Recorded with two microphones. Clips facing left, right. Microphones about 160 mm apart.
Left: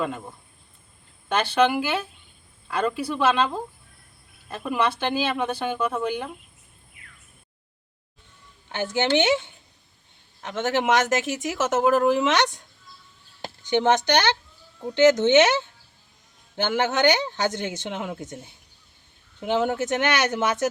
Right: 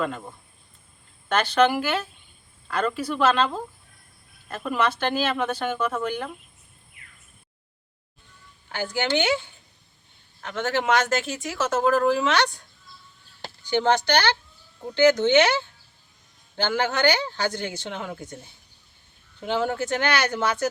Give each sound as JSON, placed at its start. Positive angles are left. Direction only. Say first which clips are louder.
{"t": 0.0, "sound": "speech", "louder": "even", "side_deg": 5}
{"t": 8.7, "sound": "speech", "louder": "left 3 dB", "side_deg": 25}
{"t": 19.4, "sound": "speech", "louder": "left 2 dB", "side_deg": 20}